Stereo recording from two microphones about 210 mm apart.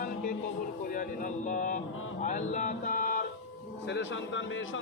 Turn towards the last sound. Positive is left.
turn(degrees=65)  # may be behind; listen again after turning